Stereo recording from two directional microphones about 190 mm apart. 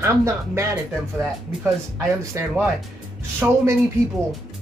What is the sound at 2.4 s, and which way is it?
Speech, 15° right (ahead or behind).